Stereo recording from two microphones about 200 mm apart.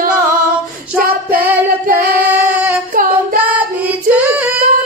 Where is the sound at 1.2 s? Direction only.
10° right (ahead or behind).